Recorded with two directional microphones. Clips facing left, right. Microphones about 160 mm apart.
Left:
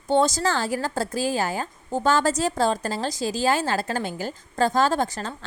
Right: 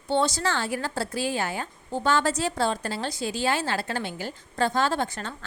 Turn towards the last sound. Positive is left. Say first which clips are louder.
# left 3 dB
turn(degrees=35)  # may be behind; listen again after turning